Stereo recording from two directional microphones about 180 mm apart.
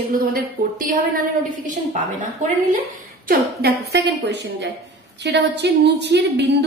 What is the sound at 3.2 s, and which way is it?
A woman's voice, 55° right (ahead or behind).